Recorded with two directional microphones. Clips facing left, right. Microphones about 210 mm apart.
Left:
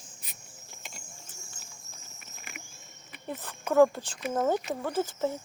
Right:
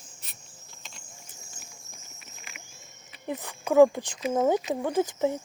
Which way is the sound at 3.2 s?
15° right (ahead or behind).